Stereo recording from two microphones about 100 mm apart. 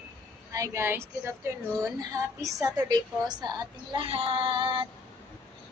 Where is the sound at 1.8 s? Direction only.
35° right (ahead or behind).